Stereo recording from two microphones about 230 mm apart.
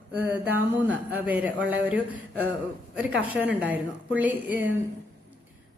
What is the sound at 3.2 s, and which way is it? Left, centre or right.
A woman's voice, centre.